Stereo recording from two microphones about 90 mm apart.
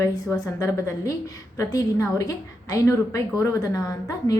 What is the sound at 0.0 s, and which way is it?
A woman's voice, 35° left (ahead or behind).